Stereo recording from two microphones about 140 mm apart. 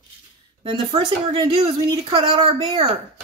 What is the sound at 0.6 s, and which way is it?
Speech, 35° right (ahead or behind).